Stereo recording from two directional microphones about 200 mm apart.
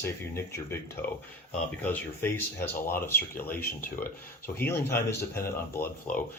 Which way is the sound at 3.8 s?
45° left (ahead or behind).